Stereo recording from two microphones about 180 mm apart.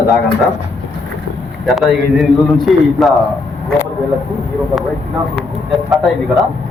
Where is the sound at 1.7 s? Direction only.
Centre (ahead or behind).